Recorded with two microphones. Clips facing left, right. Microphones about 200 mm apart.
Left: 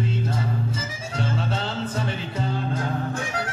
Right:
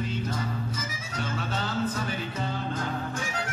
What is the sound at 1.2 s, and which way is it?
Music, 30° left (ahead or behind).